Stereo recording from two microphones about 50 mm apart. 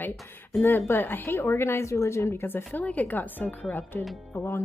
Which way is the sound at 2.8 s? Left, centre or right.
Left.